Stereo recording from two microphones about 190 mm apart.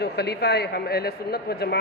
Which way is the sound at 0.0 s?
60° left (ahead or behind).